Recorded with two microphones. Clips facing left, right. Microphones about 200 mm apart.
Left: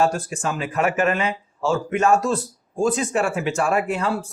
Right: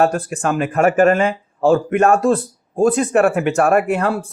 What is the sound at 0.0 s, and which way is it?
Speech, 60° right (ahead or behind).